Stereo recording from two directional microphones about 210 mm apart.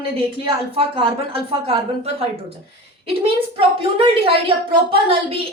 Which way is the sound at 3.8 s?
25° right (ahead or behind).